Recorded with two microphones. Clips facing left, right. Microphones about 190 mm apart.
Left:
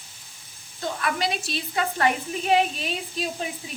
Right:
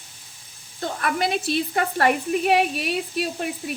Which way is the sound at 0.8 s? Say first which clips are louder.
Right 2 dB; 50° right (ahead or behind).